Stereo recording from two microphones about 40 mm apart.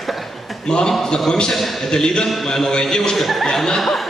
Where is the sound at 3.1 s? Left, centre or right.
Centre.